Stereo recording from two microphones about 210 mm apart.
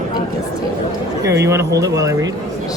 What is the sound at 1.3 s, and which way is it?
Speech, 15° right (ahead or behind).